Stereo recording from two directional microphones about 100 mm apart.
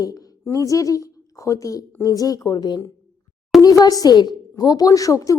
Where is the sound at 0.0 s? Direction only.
35° left (ahead or behind).